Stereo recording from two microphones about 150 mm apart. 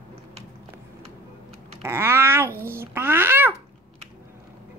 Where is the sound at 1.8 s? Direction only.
15° right (ahead or behind).